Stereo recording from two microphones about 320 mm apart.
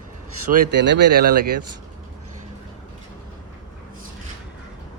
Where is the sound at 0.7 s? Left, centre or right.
Right.